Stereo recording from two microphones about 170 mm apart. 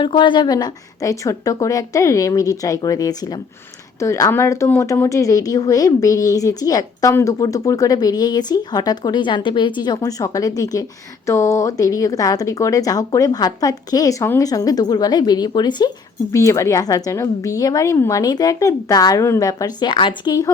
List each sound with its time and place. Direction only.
0.0 s a woman's voice: 30° left (ahead or behind)